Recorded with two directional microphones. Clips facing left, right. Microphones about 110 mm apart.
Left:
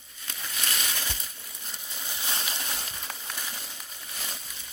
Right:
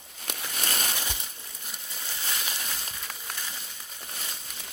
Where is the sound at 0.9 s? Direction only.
15° right (ahead or behind).